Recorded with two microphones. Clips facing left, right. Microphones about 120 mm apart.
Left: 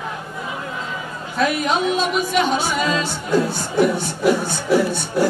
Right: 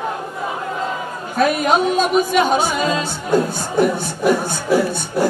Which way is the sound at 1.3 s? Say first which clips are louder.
Right 4 dB; 50° right (ahead or behind).